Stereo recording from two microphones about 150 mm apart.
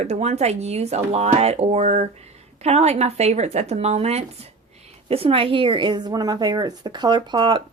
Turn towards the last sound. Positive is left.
turn(degrees=-35)  # may be behind; listen again after turning